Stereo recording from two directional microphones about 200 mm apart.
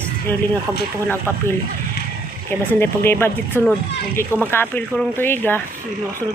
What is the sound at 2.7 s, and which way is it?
Speech, 10° left (ahead or behind).